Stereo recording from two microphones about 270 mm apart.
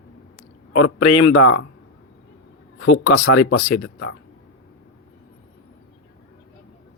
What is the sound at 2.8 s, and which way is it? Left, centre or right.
Speech, left.